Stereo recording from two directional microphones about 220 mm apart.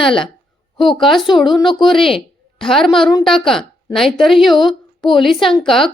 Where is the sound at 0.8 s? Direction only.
Centre (ahead or behind).